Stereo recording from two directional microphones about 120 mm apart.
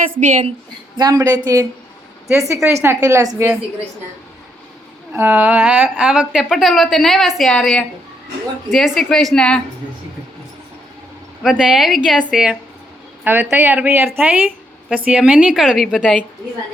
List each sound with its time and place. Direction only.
0.2 s a woman's voice: 90° right
0.9 s a woman's voice: 35° right (ahead or behind)
5.1 s a woman's voice: 15° right (ahead or behind); by 9.6 s 5° left (ahead or behind)
11.5 s a woman's voice: 5° right (ahead or behind)
13.2 s a woman's voice: 15° right (ahead or behind)